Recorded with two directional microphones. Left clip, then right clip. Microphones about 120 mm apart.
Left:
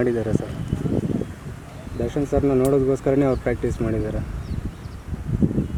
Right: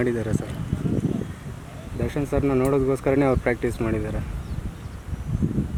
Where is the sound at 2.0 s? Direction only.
40° right (ahead or behind).